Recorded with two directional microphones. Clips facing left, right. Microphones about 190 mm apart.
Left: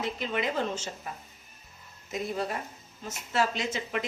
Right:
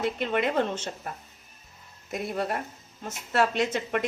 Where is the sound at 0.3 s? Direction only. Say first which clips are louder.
Right 3 dB; 60° right (ahead or behind).